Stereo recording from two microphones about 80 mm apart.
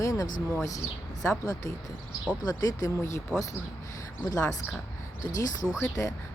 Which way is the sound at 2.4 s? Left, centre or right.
Left.